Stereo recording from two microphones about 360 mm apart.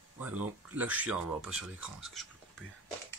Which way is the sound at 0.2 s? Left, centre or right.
Centre.